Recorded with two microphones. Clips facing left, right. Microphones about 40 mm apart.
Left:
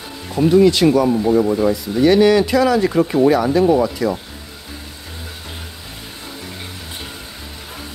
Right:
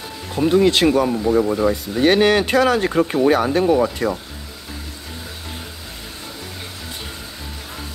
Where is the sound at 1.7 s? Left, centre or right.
Right.